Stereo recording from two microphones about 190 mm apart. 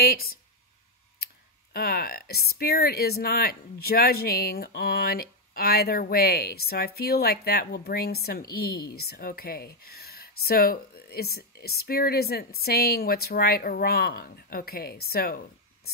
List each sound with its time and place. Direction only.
1.2 s speech: 50° left (ahead or behind)